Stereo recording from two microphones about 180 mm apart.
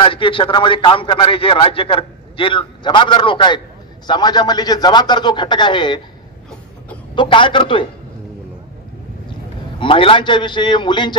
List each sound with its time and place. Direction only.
0.0 s a man's voice: 30° left (ahead or behind)
7.2 s a man's voice: 25° left (ahead or behind)
9.8 s a man's voice: 30° left (ahead or behind)